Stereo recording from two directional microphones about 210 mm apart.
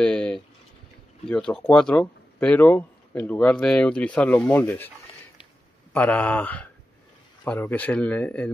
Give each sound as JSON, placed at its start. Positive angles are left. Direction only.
{"t": 0.0, "sound": "a sound", "side_deg": 5}
{"t": 1.2, "sound": "speech", "side_deg": 5}
{"t": 5.9, "sound": "speech", "side_deg": 5}